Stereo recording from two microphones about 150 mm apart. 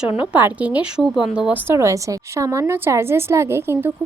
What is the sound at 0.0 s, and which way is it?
A woman's voice, 10° right (ahead or behind).